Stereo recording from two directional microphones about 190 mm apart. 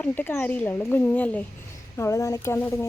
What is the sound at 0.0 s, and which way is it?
A woman's voice, 10° left (ahead or behind).